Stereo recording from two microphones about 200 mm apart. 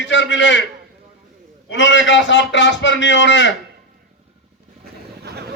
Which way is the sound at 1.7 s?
65° left (ahead or behind).